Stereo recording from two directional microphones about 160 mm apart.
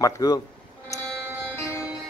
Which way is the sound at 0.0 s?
25° left (ahead or behind).